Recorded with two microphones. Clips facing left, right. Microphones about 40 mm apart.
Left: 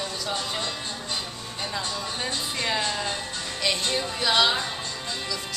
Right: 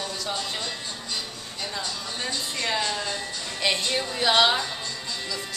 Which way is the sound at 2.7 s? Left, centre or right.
Centre.